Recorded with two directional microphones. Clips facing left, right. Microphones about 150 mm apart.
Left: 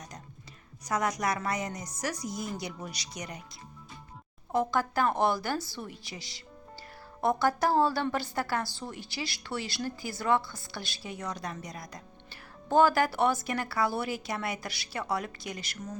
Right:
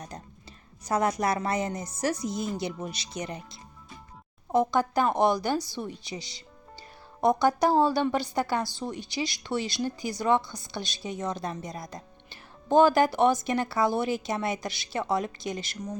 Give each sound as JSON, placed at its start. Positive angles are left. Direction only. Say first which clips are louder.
{"t": 0.9, "sound": "a woman's voice", "louder": "right 4 dB", "side_deg": -30}